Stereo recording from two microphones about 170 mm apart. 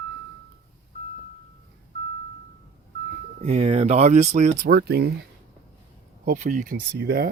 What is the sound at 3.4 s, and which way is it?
Speech, 35° right (ahead or behind).